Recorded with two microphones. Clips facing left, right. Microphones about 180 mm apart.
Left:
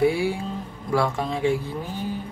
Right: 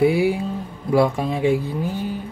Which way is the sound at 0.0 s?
15° right (ahead or behind).